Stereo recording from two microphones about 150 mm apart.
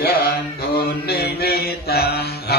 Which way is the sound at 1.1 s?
90° left.